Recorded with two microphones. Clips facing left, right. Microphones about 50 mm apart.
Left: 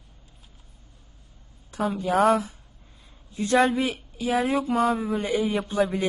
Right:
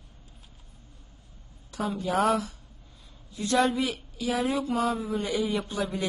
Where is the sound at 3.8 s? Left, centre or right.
Left.